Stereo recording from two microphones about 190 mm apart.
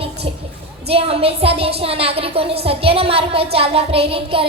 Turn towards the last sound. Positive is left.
turn(degrees=-30)  # may be behind; listen again after turning